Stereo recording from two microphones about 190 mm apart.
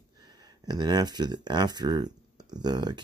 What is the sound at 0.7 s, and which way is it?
Speech, 20° right (ahead or behind).